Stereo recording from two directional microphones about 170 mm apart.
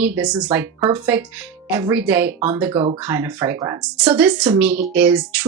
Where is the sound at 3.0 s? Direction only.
15° right (ahead or behind).